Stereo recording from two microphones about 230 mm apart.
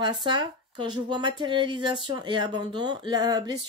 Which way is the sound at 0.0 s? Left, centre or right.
Centre.